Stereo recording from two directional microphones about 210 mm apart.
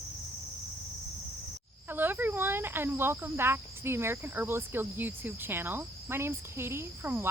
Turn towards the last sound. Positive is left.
turn(degrees=-10)  # may be behind; listen again after turning